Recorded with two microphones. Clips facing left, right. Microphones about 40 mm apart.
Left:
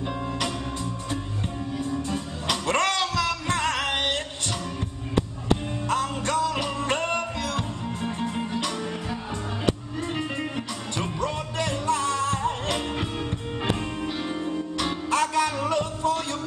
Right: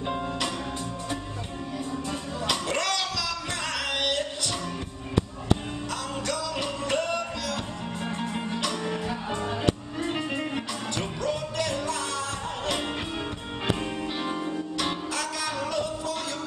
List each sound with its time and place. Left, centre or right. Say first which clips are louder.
2.0 s music: left 1 dB; centre
2.6 s music: left 4 dB; left
5.9 s music: left 6 dB; left
8.0 s music: left 2 dB; centre
10.1 s music: left 1 dB; centre
11.0 s music: left 2 dB; left
14.0 s music: left 1 dB; centre
15.0 s music: left 7 dB; left